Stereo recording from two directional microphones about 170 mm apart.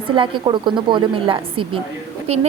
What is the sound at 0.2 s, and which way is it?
A woman's voice, 30° right (ahead or behind).